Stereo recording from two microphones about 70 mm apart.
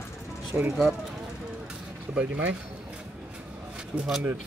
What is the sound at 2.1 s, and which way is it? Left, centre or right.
Speech, centre.